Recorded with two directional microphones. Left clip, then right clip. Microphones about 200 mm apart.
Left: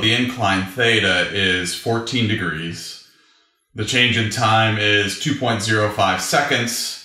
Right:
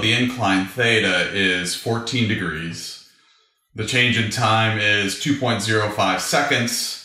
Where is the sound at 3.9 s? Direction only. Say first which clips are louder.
Left 2 dB; 30° left (ahead or behind).